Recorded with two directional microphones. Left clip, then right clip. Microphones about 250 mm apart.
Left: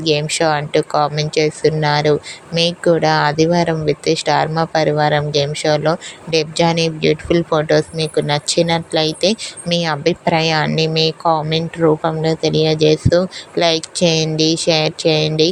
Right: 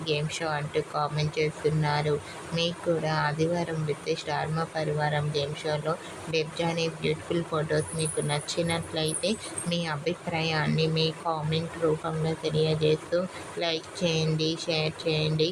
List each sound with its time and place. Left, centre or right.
0.0 s speech: left